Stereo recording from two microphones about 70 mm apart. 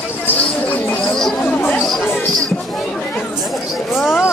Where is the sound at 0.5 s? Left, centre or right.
Left.